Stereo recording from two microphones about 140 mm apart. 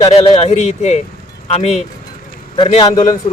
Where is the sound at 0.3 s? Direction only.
50° left (ahead or behind).